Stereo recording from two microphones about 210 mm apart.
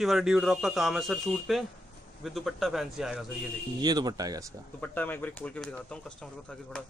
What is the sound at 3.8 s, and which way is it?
Speech, 20° right (ahead or behind).